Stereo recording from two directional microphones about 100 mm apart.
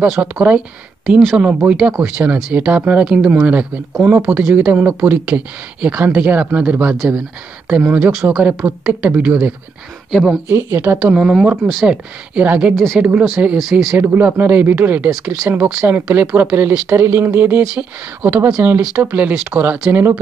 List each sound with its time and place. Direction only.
0.0 s speech: 10° right (ahead or behind)
1.0 s speech: 5° right (ahead or behind)
1.3 s speech: 15° right (ahead or behind)
10.5 s speech: 25° right (ahead or behind)
11.0 s speech: 15° right (ahead or behind)
12.7 s speech: 5° left (ahead or behind)
13.2 s speech: 10° right (ahead or behind)
13.9 s speech: 20° right (ahead or behind)